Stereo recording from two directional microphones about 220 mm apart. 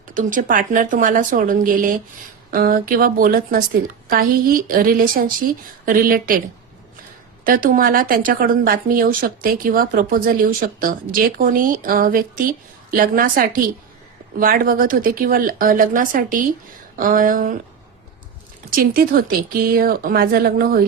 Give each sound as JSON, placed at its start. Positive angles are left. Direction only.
{"t": 0.1, "sound": "speech", "side_deg": -35}
{"t": 7.4, "sound": "speech", "side_deg": -40}
{"t": 18.8, "sound": "speech", "side_deg": -40}